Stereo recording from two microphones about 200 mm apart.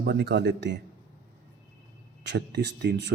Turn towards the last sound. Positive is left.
turn(degrees=-55)  # may be behind; listen again after turning